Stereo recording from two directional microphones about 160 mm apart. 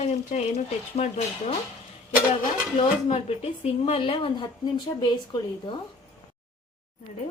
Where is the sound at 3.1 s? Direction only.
40° left (ahead or behind).